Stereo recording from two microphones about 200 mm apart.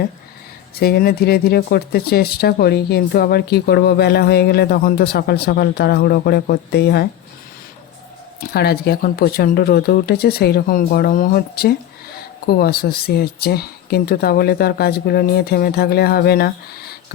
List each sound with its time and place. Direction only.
0.8 s speech: 50° left (ahead or behind)
8.4 s speech: 50° left (ahead or behind)